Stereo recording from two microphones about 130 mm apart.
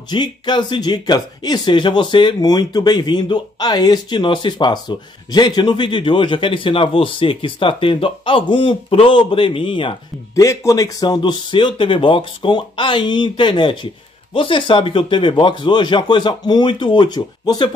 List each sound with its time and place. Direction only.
0.1 s speech: 35° left (ahead or behind)
10.3 s speech: 25° left (ahead or behind)